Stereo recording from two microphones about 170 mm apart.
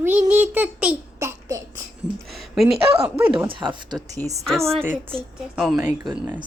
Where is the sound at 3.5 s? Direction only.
30° right (ahead or behind).